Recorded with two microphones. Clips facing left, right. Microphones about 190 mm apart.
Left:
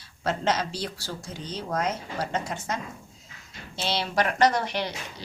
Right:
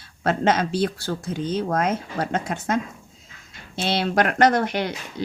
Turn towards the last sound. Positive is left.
turn(degrees=-50)  # may be behind; listen again after turning